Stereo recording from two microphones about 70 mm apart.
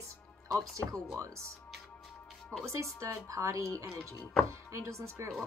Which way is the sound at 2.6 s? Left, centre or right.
Right.